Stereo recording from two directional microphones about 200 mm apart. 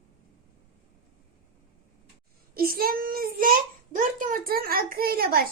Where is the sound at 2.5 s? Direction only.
50° right (ahead or behind).